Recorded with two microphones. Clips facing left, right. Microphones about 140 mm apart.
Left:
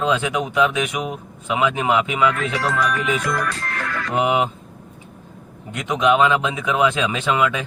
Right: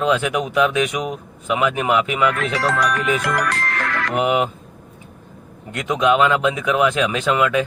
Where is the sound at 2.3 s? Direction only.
80° right.